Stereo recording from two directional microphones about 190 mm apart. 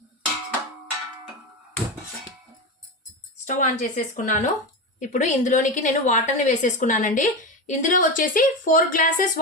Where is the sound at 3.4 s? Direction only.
40° left (ahead or behind).